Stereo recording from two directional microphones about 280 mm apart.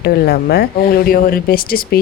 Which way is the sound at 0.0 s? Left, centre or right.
Left.